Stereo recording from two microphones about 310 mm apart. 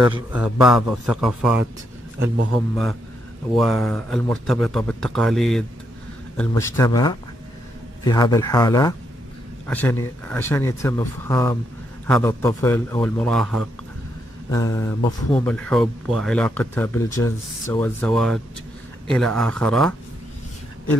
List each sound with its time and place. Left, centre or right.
0.0 s speech: centre
2.1 s a man's voice: right
2.7 s speech: centre